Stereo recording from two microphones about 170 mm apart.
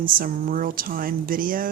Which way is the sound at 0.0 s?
55° right (ahead or behind).